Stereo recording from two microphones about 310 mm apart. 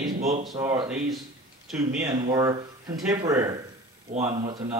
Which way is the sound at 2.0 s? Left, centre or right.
Centre.